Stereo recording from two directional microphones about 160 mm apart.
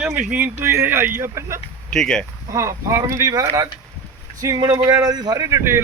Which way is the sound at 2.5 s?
20° right (ahead or behind).